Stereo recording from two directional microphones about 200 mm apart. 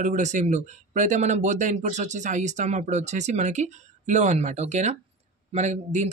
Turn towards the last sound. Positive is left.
turn(degrees=-35)  # may be behind; listen again after turning